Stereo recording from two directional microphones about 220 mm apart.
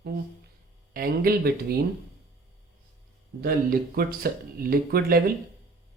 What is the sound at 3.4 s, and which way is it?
Speech, 45° right (ahead or behind).